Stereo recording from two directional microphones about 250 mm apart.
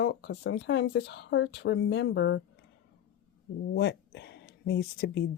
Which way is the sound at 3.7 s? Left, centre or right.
Left.